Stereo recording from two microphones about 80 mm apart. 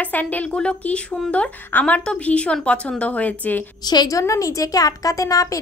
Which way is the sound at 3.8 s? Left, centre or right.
Left.